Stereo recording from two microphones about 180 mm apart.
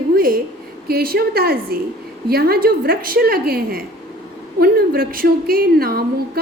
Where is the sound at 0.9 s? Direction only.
60° right (ahead or behind).